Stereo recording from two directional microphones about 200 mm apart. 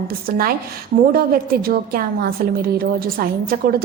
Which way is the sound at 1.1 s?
50° right (ahead or behind).